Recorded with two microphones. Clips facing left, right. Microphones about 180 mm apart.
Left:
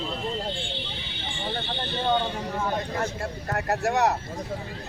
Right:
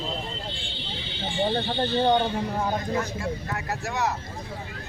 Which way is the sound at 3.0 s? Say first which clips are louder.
Left 1 dB; 60° left (ahead or behind).